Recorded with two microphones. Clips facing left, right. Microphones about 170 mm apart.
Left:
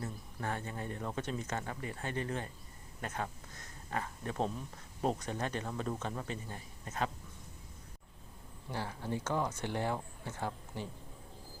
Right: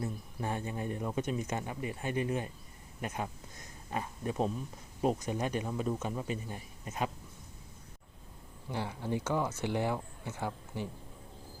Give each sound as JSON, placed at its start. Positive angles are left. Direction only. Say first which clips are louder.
{"t": 0.0, "sound": "speech", "louder": "right 3 dB", "side_deg": -15}
{"t": 8.7, "sound": "speech", "louder": "right 3 dB", "side_deg": -15}